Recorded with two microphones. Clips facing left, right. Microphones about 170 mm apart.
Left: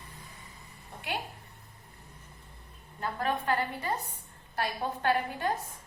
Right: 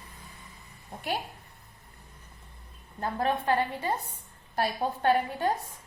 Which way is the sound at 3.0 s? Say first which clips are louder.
Right 3 dB; 30° right (ahead or behind).